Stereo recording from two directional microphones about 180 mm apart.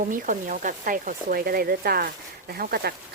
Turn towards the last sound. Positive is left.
turn(degrees=-60)  # may be behind; listen again after turning